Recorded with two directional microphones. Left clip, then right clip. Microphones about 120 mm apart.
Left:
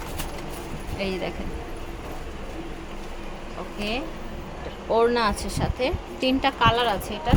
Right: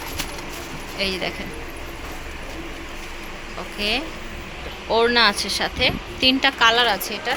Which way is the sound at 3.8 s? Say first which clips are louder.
Right 7 dB; 5° left (ahead or behind).